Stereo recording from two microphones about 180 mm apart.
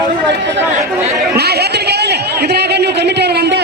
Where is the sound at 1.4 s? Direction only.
65° right (ahead or behind).